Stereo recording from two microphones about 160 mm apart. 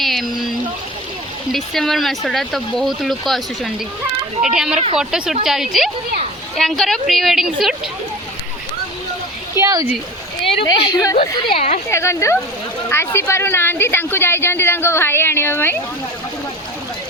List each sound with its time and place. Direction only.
0.0 s a sound: centre (ahead or behind)
1.5 s speech: centre (ahead or behind)
9.6 s speech: 20° right (ahead or behind)
10.6 s speech: 30° left (ahead or behind)
11.2 s speech: 45° left (ahead or behind)
11.9 s speech: 15° left (ahead or behind)